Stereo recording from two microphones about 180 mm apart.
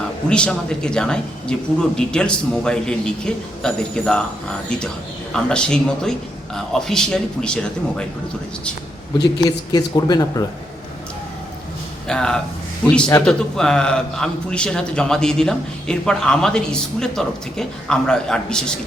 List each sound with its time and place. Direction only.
0.3 s a man's voice: 5° left (ahead or behind)
9.1 s speech: 20° left (ahead or behind)
12.0 s a man's voice: 5° left (ahead or behind)